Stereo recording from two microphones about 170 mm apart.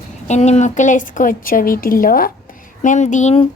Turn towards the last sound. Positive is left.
turn(degrees=45)  # may be behind; listen again after turning